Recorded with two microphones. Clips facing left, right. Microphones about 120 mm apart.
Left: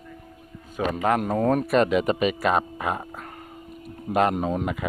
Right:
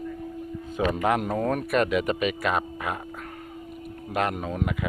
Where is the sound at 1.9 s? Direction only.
35° left (ahead or behind).